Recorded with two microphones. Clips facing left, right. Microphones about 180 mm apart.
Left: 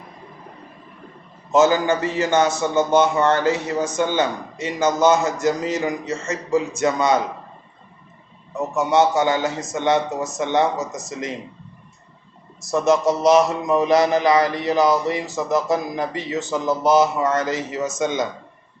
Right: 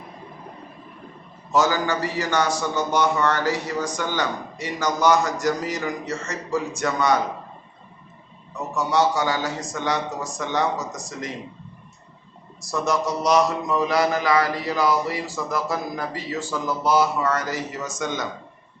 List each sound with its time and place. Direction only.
1.5 s a man's voice: 20° left (ahead or behind)
8.7 s a man's voice: 20° left (ahead or behind)
12.5 s a man's voice: 25° left (ahead or behind)